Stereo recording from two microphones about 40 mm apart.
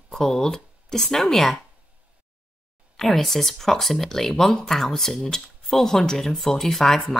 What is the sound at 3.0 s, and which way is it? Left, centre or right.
Speech, centre.